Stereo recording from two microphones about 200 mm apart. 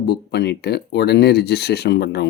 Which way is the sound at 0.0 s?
55° left (ahead or behind).